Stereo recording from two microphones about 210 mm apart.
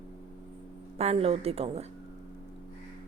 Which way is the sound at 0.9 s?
30° right (ahead or behind).